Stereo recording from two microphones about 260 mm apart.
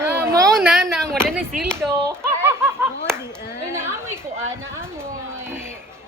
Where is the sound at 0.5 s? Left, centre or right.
Centre.